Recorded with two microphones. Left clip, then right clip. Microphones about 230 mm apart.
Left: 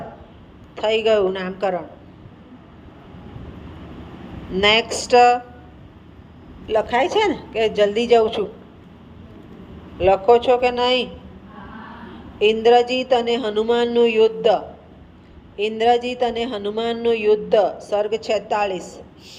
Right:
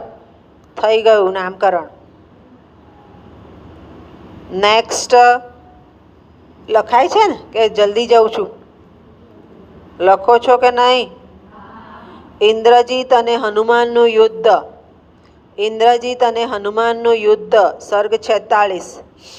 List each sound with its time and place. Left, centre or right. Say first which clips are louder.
0.8 s speech: right 7 dB; right
4.5 s speech: right 4 dB; right
6.7 s speech: right 7 dB; right
10.0 s speech: right 4 dB; right
12.4 s speech: right 5 dB; right